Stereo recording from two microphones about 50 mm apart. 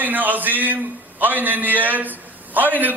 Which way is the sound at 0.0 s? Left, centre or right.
Right.